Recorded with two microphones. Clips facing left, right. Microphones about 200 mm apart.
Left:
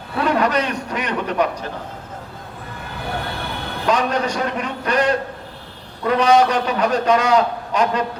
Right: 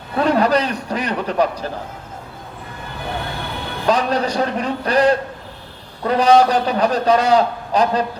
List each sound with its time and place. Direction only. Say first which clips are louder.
0.2 s a man's voice: right 3 dB; 35° right (ahead or behind)
3.8 s a man's voice: right 2 dB; 35° right (ahead or behind)